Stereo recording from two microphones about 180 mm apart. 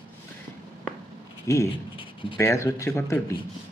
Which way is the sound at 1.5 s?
15° left (ahead or behind).